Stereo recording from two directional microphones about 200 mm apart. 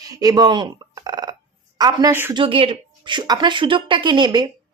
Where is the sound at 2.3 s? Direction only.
25° right (ahead or behind).